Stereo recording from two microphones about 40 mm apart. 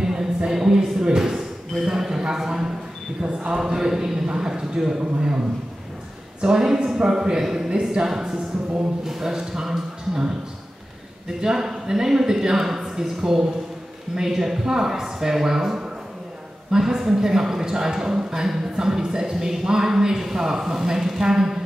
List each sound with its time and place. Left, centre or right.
0.0 s a sound: centre
1.9 s a woman's voice: centre
6.4 s a woman's voice: centre